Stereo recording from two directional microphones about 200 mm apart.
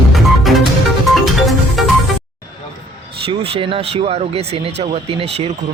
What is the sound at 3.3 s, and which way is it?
Speech, 25° right (ahead or behind).